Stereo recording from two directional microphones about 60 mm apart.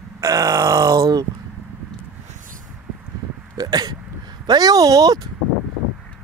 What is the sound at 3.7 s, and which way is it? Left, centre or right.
Speech, right.